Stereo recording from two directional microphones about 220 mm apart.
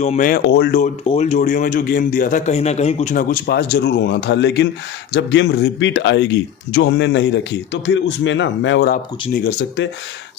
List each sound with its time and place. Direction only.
0.0 s speech: 35° left (ahead or behind)
0.8 s speech: 30° left (ahead or behind); by 9.8 s 45° left (ahead or behind)